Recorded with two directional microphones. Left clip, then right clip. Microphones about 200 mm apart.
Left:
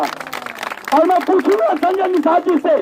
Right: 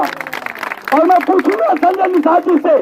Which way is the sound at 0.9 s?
40° right (ahead or behind).